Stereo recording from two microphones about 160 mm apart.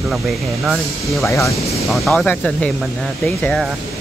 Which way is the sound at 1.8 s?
Centre (ahead or behind).